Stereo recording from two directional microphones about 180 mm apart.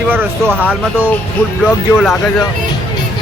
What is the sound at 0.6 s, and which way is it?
Speech, 10° right (ahead or behind).